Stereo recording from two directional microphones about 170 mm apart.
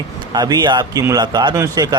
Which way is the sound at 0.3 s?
25° right (ahead or behind).